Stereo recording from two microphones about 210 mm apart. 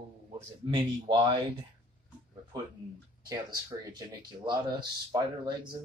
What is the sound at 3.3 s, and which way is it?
Speech, 20° right (ahead or behind).